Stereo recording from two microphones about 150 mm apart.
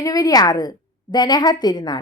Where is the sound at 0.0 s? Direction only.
25° left (ahead or behind).